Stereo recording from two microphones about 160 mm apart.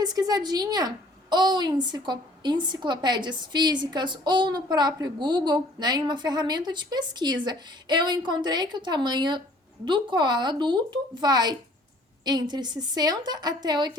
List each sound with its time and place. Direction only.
0.0 s a woman's voice: 25° right (ahead or behind)